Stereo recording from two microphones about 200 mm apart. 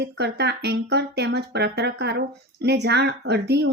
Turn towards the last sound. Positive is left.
turn(degrees=-55)  # may be behind; listen again after turning